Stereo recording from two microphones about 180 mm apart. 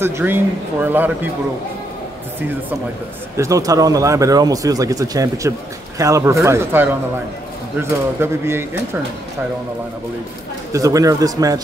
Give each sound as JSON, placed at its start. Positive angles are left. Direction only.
{"t": 0.0, "sound": "speech", "side_deg": -10}
{"t": 3.3, "sound": "speech", "side_deg": -15}
{"t": 8.2, "sound": "speech", "side_deg": -15}
{"t": 10.7, "sound": "speech", "side_deg": -20}